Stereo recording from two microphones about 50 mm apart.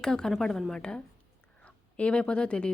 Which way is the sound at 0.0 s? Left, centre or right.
Centre.